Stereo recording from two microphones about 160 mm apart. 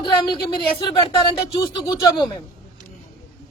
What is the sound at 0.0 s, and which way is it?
Speech, 30° left (ahead or behind).